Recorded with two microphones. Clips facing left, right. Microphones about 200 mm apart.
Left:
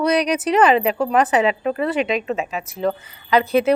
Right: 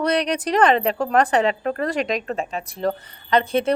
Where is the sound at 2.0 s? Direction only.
35° right (ahead or behind).